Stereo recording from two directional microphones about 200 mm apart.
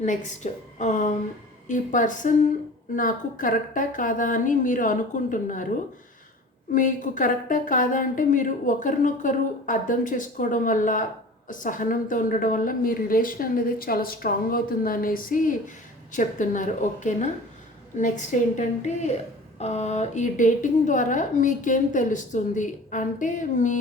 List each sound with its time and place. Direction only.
0.0 s a woman's voice: 40° left (ahead or behind)
6.7 s a woman's voice: 40° left (ahead or behind)